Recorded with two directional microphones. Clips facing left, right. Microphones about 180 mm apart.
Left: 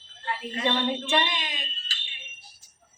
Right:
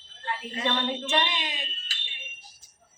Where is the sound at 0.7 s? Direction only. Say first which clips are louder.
Left 2 dB; 10° left (ahead or behind).